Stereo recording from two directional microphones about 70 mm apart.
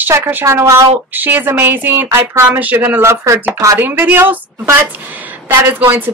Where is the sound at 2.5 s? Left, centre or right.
Right.